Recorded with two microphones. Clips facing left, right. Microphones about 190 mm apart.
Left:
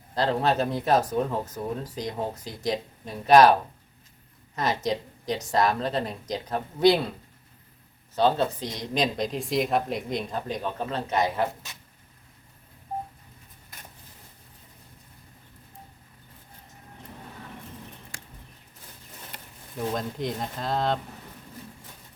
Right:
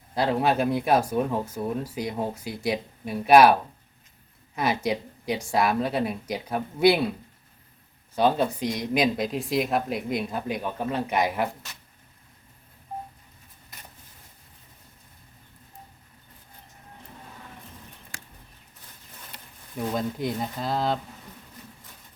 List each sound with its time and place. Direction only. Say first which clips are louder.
0.1 s speech: right 1 dB; 10° right (ahead or behind)
8.1 s speech: right 1 dB; 10° right (ahead or behind)
19.9 s speech: right 3 dB; 5° right (ahead or behind)